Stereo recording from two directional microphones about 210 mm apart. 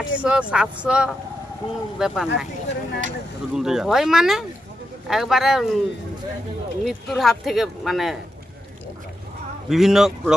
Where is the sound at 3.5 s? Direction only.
Centre (ahead or behind).